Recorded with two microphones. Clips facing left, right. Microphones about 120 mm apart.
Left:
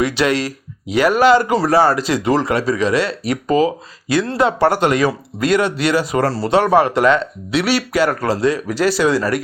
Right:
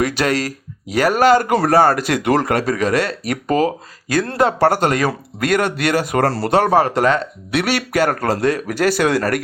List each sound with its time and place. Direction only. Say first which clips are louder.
0.0 s speech: left 1 dB; 45° right (ahead or behind); by 6.5 s 60° right (ahead or behind)
6.5 s speech: left 2 dB; 40° right (ahead or behind)
7.5 s speech: left 1 dB; 55° right (ahead or behind)